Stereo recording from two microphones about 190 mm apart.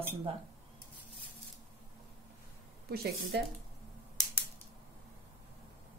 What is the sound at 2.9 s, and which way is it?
Speech, 55° right (ahead or behind).